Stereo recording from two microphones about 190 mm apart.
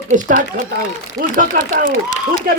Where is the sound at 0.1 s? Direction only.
45° right (ahead or behind).